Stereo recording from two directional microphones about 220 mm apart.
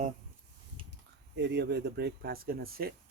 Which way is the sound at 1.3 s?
50° right (ahead or behind).